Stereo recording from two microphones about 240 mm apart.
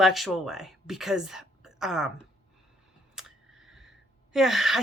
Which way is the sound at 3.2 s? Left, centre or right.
Centre.